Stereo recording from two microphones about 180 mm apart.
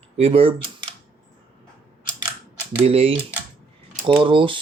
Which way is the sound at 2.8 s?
30° right (ahead or behind).